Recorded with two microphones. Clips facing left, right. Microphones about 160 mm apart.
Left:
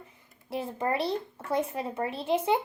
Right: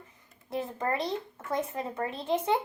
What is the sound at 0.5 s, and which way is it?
A child's voice, 20° left (ahead or behind).